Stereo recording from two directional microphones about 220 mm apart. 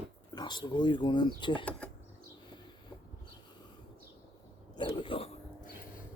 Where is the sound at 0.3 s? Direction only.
20° left (ahead or behind).